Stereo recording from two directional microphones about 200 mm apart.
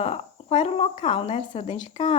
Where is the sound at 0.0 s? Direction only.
30° left (ahead or behind).